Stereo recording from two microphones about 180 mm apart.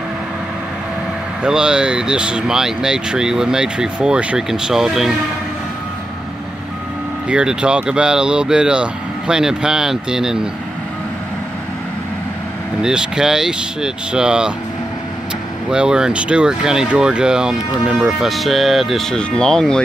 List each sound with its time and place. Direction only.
1.4 s speech: 5° right (ahead or behind)
7.2 s speech: 5° right (ahead or behind)
12.8 s speech: 5° right (ahead or behind)
15.7 s speech: 5° right (ahead or behind)